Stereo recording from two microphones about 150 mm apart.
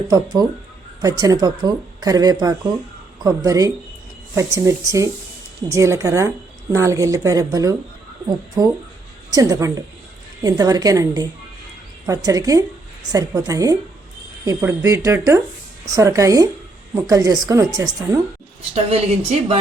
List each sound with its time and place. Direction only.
0.1 s speech: 25° right (ahead or behind)
18.7 s speech: 45° right (ahead or behind)